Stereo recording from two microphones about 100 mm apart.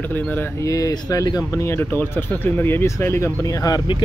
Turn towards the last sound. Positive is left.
turn(degrees=35)  # may be behind; listen again after turning